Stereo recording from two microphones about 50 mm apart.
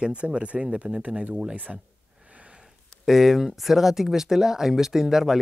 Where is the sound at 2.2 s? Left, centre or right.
Right.